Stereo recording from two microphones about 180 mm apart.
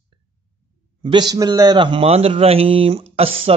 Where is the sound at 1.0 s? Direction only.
25° right (ahead or behind).